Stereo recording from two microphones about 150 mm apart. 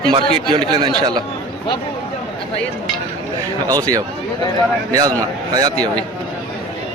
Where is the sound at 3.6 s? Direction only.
25° right (ahead or behind).